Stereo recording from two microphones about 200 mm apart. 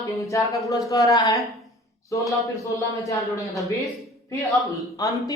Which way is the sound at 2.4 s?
15° left (ahead or behind).